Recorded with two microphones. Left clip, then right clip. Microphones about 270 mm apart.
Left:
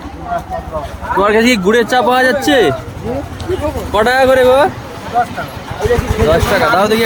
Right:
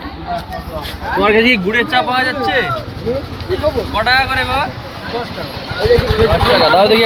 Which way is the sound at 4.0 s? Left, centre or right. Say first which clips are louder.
Left 6 dB; left.